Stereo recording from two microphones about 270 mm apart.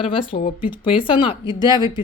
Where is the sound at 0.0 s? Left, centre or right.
Centre.